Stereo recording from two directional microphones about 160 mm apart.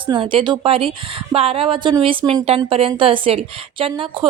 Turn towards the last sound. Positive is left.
turn(degrees=-35)  # may be behind; listen again after turning